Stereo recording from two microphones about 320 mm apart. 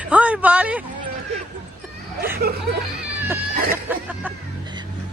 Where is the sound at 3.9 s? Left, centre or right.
Centre.